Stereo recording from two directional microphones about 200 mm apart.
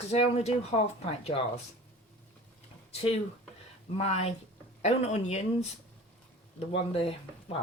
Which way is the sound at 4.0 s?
35° left (ahead or behind).